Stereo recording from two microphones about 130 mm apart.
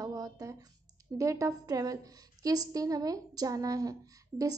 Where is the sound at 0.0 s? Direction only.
25° right (ahead or behind).